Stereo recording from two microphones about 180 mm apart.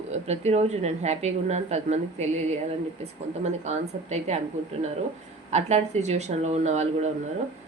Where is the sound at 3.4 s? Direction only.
40° right (ahead or behind).